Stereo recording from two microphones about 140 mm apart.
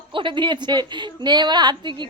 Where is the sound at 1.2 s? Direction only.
30° right (ahead or behind).